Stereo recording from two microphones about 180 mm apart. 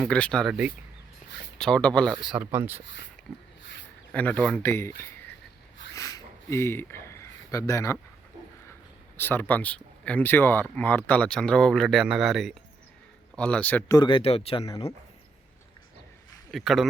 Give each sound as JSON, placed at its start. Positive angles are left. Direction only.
{"t": 0.0, "sound": "speech", "side_deg": 5}
{"t": 4.1, "sound": "speech", "side_deg": 10}
{"t": 4.9, "sound": "a sound", "side_deg": 15}
{"t": 7.5, "sound": "speech", "side_deg": 15}
{"t": 9.1, "sound": "speech", "side_deg": 10}
{"t": 13.9, "sound": "speech", "side_deg": 25}
{"t": 16.5, "sound": "speech", "side_deg": 0}